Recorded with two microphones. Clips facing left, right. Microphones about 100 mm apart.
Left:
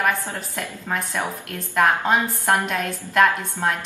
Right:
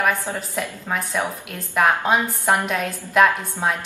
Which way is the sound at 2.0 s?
15° right (ahead or behind).